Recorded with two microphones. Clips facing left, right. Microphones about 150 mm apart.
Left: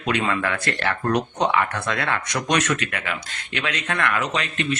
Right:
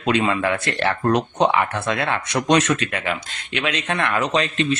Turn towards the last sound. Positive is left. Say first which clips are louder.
# right 5 dB
turn(degrees=-35)  # may be behind; listen again after turning